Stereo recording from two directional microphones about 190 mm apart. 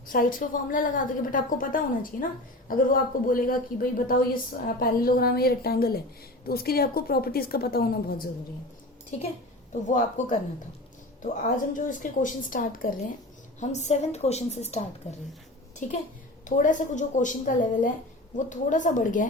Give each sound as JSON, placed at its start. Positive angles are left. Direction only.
{"t": 0.1, "sound": "a woman's voice", "side_deg": 45}
{"t": 9.8, "sound": "a woman's voice", "side_deg": 40}
{"t": 11.7, "sound": "a woman's voice", "side_deg": 45}